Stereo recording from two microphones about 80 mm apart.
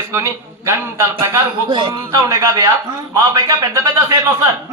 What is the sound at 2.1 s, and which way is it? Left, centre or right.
Speech, right.